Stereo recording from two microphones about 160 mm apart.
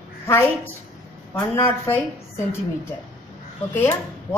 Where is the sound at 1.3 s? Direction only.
15° left (ahead or behind).